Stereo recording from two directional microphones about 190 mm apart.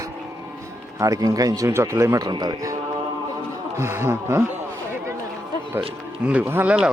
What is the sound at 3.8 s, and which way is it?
Speech, 15° right (ahead or behind).